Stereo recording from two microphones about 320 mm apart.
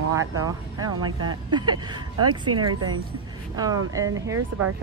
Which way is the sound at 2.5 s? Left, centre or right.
Right.